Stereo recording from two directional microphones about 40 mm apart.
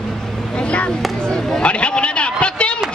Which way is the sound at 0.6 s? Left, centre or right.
Left.